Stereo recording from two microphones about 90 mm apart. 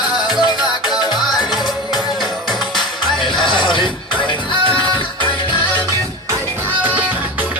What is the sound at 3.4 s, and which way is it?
Music, 60° left (ahead or behind).